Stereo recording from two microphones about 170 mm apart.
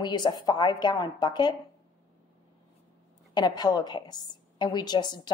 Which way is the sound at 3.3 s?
25° left (ahead or behind).